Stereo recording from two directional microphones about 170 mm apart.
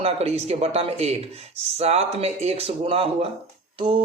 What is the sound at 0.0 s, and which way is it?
A man's voice, 35° right (ahead or behind).